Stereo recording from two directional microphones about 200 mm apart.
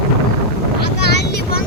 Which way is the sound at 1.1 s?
55° left (ahead or behind).